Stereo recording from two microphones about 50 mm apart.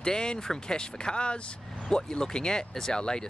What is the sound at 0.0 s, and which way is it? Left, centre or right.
Speech, centre.